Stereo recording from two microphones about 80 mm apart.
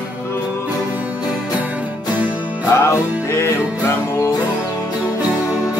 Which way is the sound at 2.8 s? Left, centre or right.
Left.